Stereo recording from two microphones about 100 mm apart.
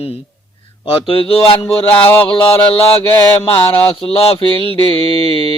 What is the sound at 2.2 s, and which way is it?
Mantra, 55° left (ahead or behind).